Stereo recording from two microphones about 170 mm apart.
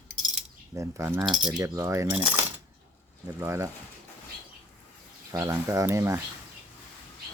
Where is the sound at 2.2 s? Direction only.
5° right (ahead or behind).